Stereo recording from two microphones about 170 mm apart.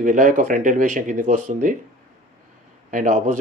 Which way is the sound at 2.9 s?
50° right (ahead or behind).